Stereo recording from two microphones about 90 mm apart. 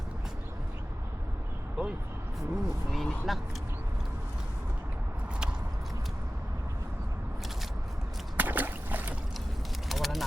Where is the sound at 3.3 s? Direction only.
Centre (ahead or behind).